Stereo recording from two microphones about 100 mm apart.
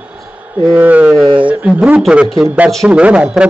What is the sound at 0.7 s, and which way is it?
Speech, 15° right (ahead or behind).